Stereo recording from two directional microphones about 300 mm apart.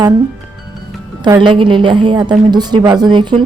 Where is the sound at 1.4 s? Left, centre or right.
Centre.